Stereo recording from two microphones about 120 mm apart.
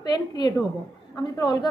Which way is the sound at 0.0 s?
35° left (ahead or behind).